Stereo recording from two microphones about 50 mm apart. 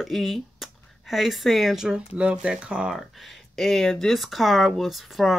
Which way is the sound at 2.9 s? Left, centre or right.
Centre.